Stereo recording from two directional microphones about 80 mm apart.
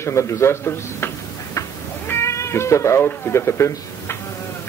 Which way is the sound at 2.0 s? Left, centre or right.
Left.